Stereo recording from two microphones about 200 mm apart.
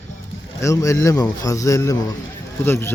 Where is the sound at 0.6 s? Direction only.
15° left (ahead or behind).